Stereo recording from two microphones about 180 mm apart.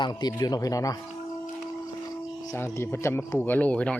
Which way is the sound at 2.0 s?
15° left (ahead or behind).